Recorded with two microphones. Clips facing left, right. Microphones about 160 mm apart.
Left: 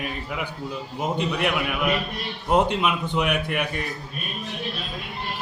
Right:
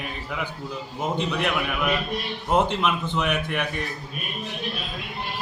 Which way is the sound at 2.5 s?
5° left (ahead or behind).